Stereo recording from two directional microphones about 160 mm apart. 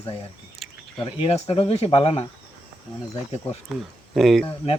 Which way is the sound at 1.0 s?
40° left (ahead or behind).